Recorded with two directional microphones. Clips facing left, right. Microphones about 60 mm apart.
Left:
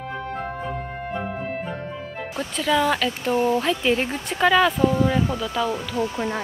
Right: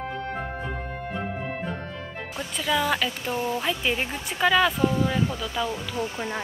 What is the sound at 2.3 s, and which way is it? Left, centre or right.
Speech, centre.